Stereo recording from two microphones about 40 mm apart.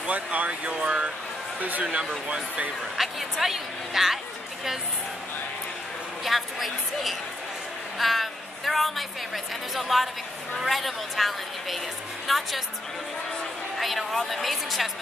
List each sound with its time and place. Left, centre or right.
0.0 s speech: right
1.6 s speech: right
3.0 s speech: centre
6.2 s a woman's voice: centre
13.7 s a woman's voice: centre